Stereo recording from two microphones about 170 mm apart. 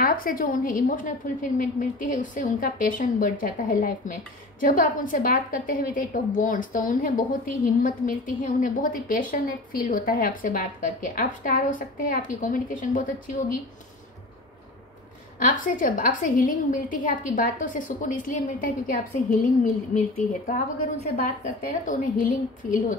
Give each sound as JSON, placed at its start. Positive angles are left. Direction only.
{"t": 0.0, "sound": "a woman's voice", "side_deg": 55}
{"t": 15.3, "sound": "a woman's voice", "side_deg": 50}